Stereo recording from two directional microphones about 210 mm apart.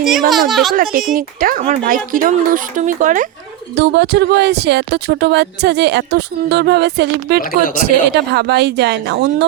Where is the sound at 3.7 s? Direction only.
55° right (ahead or behind).